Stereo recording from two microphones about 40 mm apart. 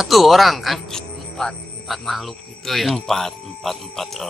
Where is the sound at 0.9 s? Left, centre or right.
Centre.